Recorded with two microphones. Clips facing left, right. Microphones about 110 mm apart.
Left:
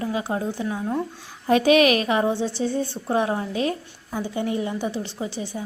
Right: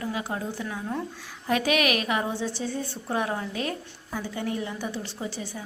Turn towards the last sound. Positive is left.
turn(degrees=20)  # may be behind; listen again after turning